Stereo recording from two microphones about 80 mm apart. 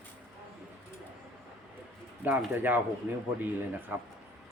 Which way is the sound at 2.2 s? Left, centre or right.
Right.